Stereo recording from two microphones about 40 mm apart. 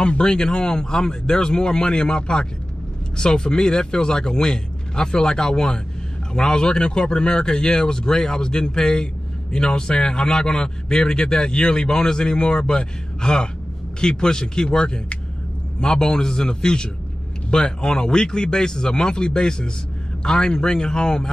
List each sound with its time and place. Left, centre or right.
0.0 s a man's voice: left